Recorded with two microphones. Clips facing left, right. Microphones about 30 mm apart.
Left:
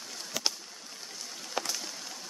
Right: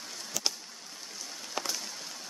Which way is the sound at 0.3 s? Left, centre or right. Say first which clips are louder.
Left 1 dB; left.